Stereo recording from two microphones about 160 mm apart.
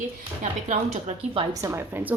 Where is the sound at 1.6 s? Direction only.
15° right (ahead or behind).